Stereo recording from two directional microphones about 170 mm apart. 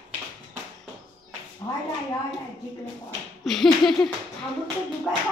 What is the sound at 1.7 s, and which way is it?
Speech, 20° left (ahead or behind).